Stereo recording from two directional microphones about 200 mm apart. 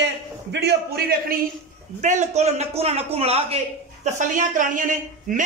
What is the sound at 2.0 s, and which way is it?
Speech, 35° right (ahead or behind).